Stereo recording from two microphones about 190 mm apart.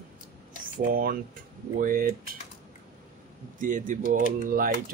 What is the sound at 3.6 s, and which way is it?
Speech, 45° right (ahead or behind).